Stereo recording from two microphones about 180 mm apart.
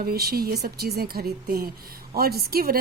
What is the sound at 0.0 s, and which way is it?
A woman's voice, 55° right (ahead or behind).